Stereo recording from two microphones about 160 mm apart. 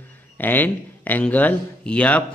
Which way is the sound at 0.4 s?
10° left (ahead or behind).